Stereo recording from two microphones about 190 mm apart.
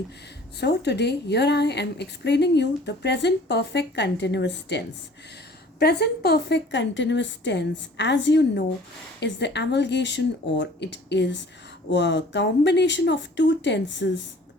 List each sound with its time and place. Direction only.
0.6 s a woman's voice: 60° left (ahead or behind)